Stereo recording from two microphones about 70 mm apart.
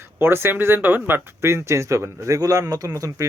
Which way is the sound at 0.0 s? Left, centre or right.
Right.